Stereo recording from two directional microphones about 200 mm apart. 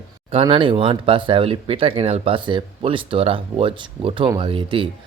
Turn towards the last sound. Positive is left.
turn(degrees=-25)  # may be behind; listen again after turning